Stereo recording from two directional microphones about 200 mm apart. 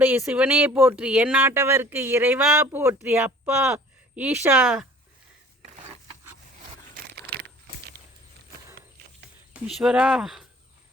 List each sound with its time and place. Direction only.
0.0 s speech: 10° right (ahead or behind)
6.9 s a sound: 55° right (ahead or behind)
9.5 s speech: 5° right (ahead or behind)